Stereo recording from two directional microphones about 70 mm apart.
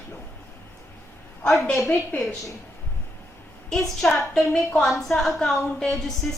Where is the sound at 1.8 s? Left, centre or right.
Centre.